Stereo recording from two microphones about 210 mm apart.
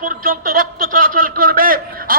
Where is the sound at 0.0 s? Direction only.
45° right (ahead or behind).